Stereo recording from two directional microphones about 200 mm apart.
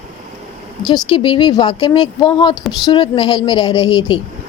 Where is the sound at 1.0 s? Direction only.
25° left (ahead or behind).